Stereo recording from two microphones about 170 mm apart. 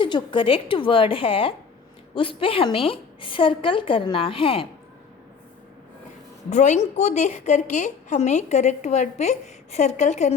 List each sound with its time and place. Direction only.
0.0 s a woman's voice: 30° left (ahead or behind)
6.5 s a woman's voice: 45° left (ahead or behind)